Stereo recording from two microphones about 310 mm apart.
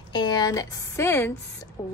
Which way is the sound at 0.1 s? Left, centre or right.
Centre.